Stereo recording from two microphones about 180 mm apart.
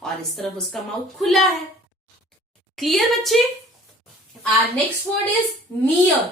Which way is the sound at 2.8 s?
Centre (ahead or behind).